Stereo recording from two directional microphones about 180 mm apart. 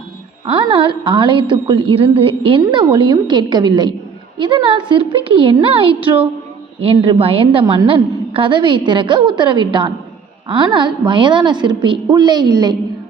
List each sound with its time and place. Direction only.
0.4 s a woman's voice: 25° right (ahead or behind)